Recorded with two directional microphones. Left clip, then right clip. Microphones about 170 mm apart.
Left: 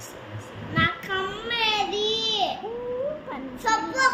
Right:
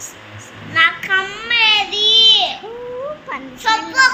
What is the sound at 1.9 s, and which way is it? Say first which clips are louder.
Child singing: right 14 dB; 40° left (ahead or behind).